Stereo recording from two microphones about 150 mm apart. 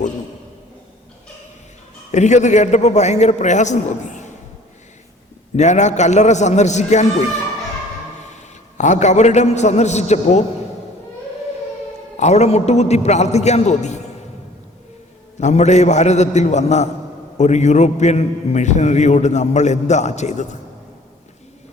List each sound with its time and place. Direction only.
2.1 s a man's voice: 50° left (ahead or behind)
5.5 s a man's voice: 50° left (ahead or behind)
8.8 s a man's voice: 55° left (ahead or behind)
12.1 s a man's voice: 50° left (ahead or behind)
15.4 s a man's voice: 50° left (ahead or behind)